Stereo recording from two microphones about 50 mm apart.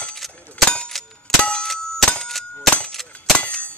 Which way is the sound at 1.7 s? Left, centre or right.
Centre.